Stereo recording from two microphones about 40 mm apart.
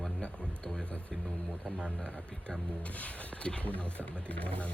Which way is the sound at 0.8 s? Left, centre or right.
Left.